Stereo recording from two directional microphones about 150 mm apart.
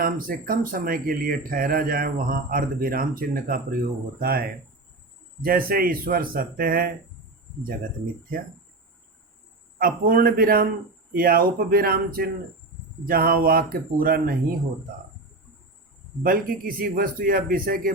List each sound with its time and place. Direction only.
0.0 s speech: 70° right (ahead or behind)
4.2 s speech: 90° right
5.4 s speech: 75° right (ahead or behind)
9.7 s speech: 70° right (ahead or behind)
16.2 s speech: 75° right (ahead or behind)